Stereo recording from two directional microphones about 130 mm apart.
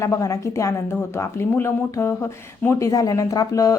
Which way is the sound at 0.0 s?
25° left (ahead or behind).